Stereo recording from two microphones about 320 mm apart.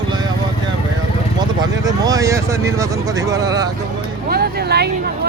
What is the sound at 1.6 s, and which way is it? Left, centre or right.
Speech, centre.